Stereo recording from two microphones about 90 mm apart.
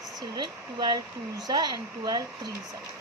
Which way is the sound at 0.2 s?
55° right (ahead or behind).